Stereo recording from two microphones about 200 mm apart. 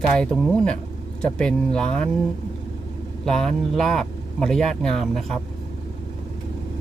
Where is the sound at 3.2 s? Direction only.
Centre (ahead or behind).